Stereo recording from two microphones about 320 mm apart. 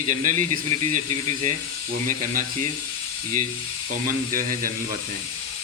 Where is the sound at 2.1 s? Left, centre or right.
Right.